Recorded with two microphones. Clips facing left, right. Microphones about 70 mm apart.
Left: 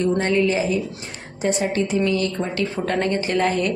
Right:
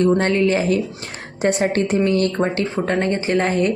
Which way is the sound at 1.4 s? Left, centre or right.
Right.